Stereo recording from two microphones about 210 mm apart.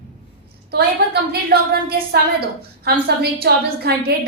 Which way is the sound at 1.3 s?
50° right (ahead or behind).